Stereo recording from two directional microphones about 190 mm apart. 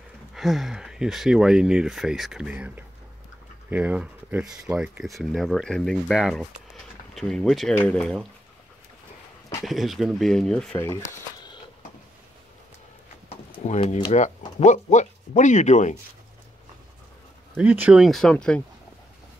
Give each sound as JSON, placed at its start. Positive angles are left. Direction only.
{"t": 0.3, "sound": "speech", "side_deg": 0}
{"t": 9.7, "sound": "speech", "side_deg": 0}
{"t": 13.3, "sound": "a sound", "side_deg": 35}
{"t": 14.6, "sound": "speech", "side_deg": 40}
{"t": 17.6, "sound": "speech", "side_deg": -5}